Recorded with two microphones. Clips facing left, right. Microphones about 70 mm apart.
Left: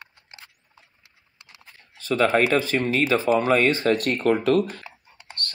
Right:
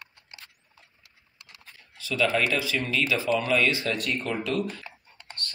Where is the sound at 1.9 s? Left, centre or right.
Left.